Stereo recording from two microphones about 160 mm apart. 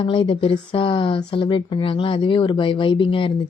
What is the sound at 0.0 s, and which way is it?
Speech, 35° left (ahead or behind).